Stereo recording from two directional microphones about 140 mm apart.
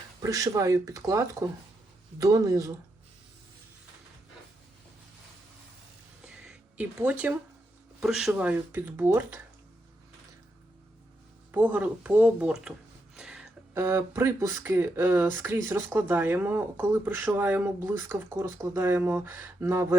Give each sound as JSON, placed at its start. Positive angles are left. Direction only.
{"t": 0.2, "sound": "speech", "side_deg": -25}
{"t": 6.2, "sound": "a sound", "side_deg": -5}
{"t": 8.0, "sound": "speech", "side_deg": -5}
{"t": 11.5, "sound": "speech", "side_deg": -10}
{"t": 13.1, "sound": "a sound", "side_deg": -5}
{"t": 13.7, "sound": "speech", "side_deg": -20}